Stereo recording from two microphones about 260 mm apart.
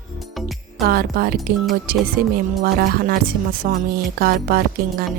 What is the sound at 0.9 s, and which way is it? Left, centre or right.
Speech, right.